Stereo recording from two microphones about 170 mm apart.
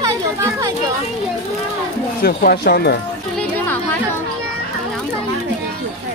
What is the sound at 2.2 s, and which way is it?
Speech, 65° left (ahead or behind).